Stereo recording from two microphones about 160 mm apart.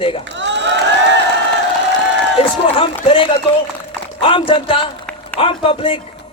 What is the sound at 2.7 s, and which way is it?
A man's voice, 35° left (ahead or behind).